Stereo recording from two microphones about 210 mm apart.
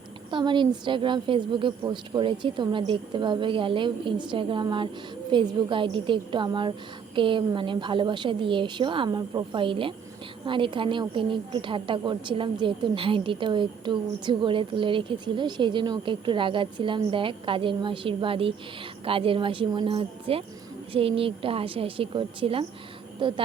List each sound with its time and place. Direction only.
0.3 s a woman's voice: 20° right (ahead or behind)